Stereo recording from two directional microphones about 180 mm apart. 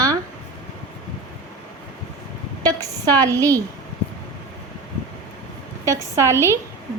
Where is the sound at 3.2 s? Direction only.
20° right (ahead or behind).